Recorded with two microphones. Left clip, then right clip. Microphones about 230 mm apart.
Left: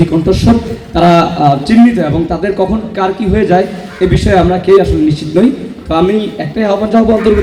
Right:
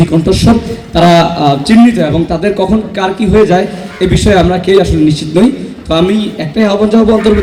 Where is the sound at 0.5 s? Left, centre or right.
Right.